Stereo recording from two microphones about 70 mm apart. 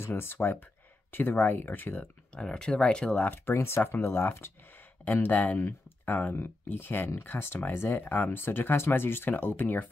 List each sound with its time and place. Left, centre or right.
0.0 s speech: left
2.3 s speech: centre
3.3 s speech: left